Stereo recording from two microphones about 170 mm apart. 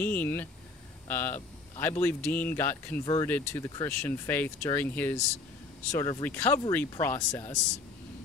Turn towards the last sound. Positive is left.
turn(degrees=15)  # may be behind; listen again after turning